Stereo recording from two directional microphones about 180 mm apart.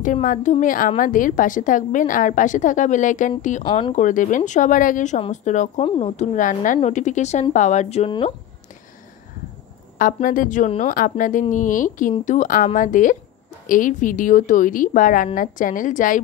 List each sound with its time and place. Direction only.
0.0 s a woman's voice: 45° left (ahead or behind)
3.6 s speech: 25° left (ahead or behind)
3.9 s a woman's voice: 45° left (ahead or behind)
9.9 s a woman's voice: 50° left (ahead or behind)